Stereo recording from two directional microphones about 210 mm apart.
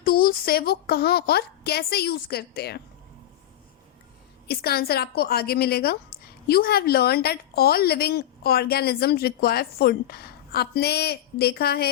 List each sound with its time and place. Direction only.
0.0 s a woman's voice: 45° left (ahead or behind)
4.4 s a woman's voice: 45° left (ahead or behind)